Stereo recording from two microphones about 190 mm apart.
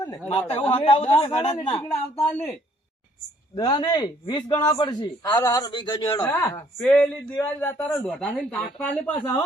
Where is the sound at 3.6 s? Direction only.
25° left (ahead or behind).